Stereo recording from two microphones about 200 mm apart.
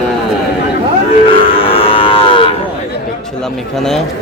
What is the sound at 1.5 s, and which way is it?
Cattle, 25° left (ahead or behind).